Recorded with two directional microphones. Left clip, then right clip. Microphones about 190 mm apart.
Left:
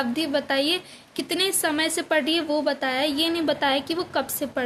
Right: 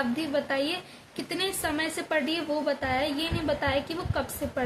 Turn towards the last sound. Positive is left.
turn(degrees=55)  # may be behind; listen again after turning